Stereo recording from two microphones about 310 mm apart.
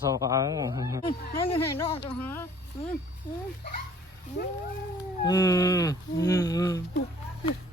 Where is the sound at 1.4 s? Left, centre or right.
Centre.